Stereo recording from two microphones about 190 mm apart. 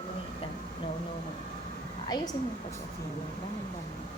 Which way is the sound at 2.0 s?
20° left (ahead or behind).